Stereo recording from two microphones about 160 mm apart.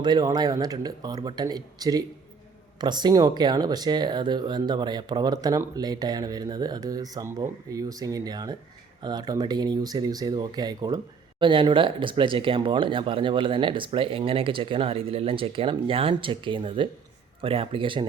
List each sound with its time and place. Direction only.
0.0 s speech: 25° right (ahead or behind)